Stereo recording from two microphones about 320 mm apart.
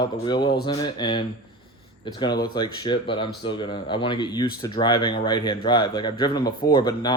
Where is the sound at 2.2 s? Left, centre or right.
Centre.